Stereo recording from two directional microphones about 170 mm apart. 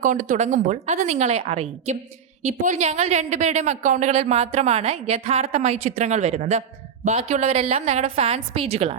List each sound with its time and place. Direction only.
0.0 s a woman's voice: 50° right (ahead or behind)